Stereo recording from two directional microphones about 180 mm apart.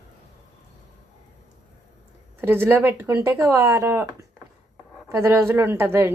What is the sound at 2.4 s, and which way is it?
A woman's voice, 10° right (ahead or behind).